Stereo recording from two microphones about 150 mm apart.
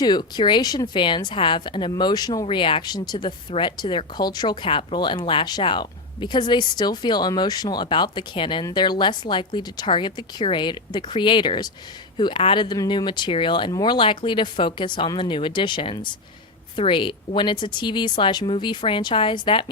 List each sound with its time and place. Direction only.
0.0 s a woman's voice: 30° left (ahead or behind)